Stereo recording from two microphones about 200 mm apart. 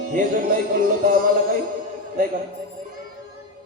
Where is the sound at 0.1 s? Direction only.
40° right (ahead or behind).